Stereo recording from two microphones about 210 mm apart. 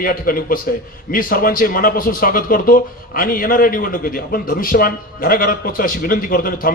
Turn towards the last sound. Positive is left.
turn(degrees=40)  # may be behind; listen again after turning